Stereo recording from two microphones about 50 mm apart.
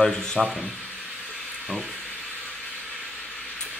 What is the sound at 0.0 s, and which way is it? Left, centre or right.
Speech, centre.